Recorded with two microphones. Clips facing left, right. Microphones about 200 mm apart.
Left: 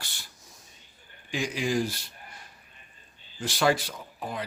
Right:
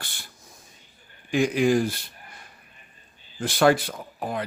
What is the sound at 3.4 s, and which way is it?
Speech, 55° right (ahead or behind).